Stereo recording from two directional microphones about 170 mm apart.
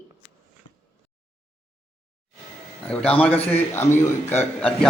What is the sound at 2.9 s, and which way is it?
A man's voice, 5° left (ahead or behind).